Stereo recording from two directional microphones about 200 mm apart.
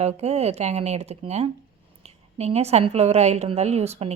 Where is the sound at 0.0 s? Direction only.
30° right (ahead or behind).